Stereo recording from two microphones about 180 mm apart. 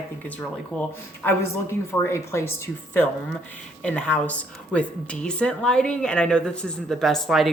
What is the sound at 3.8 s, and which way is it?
A woman's voice, 5° left (ahead or behind).